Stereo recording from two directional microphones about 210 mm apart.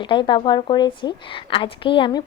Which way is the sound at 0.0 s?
20° left (ahead or behind).